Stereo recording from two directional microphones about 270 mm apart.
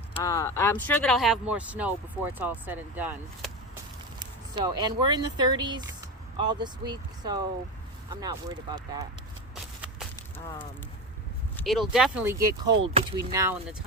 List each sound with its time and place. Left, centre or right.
0.1 s speech: centre
11.5 s speech: centre
12.9 s speech: centre